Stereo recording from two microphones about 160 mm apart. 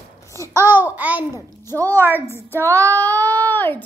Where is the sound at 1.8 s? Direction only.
15° right (ahead or behind).